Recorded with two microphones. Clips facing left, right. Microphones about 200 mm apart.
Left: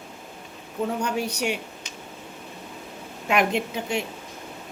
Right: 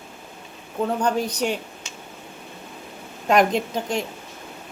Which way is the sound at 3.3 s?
40° right (ahead or behind).